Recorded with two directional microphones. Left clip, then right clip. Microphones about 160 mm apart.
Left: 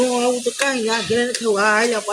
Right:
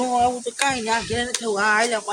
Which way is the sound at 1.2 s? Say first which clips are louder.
Left 4 dB; 25° right (ahead or behind).